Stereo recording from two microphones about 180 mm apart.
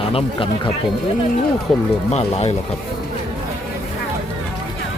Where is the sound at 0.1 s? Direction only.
30° left (ahead or behind).